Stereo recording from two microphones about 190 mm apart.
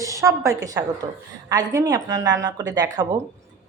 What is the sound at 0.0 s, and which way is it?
A woman's voice, 15° right (ahead or behind).